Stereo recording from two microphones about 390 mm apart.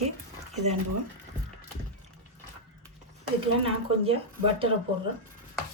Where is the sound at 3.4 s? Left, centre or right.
Centre.